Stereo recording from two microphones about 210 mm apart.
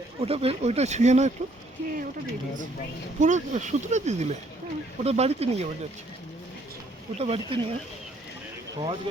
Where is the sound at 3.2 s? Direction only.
35° right (ahead or behind).